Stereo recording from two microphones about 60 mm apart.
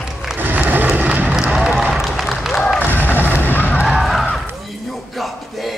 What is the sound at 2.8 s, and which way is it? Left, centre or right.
Music, left.